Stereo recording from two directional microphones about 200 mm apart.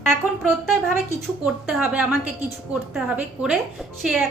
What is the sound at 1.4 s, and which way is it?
A woman's voice, 5° right (ahead or behind).